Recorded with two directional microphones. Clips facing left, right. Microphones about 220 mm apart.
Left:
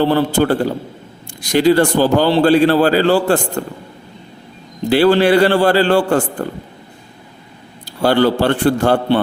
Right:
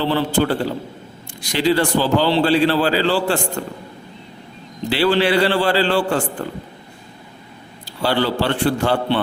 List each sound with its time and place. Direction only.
0.0 s a man's voice: 50° left (ahead or behind)
4.9 s a man's voice: 45° left (ahead or behind)
8.0 s a man's voice: 50° left (ahead or behind)